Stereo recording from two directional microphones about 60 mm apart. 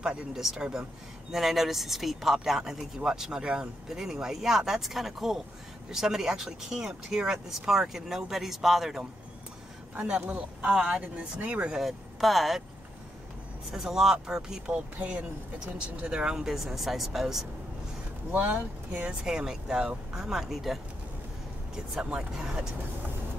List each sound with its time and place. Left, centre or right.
0.0 s speech: centre
10.2 s speech: right
10.7 s speech: centre
11.8 s speech: centre
13.7 s speech: centre
18.3 s speech: right
18.9 s speech: centre
22.4 s speech: centre